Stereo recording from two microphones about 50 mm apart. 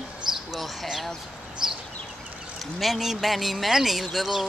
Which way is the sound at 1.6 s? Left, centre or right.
Centre.